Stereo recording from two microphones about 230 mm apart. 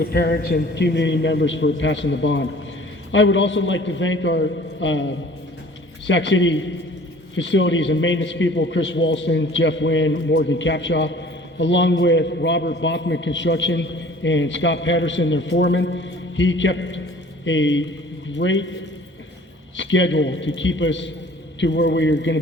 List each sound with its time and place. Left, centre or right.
0.0 s a man's voice: left
19.7 s a man's voice: left